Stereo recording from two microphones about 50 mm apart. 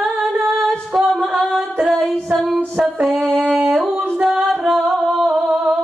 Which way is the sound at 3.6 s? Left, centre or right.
Centre.